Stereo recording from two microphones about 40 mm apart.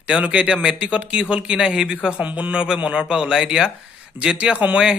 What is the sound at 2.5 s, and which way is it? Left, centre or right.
A man's voice, right.